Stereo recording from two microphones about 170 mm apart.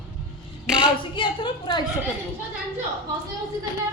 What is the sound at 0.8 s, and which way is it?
A woman's voice, 30° left (ahead or behind).